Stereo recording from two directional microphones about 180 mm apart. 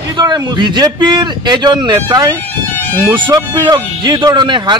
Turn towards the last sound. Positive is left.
turn(degrees=-25)  # may be behind; listen again after turning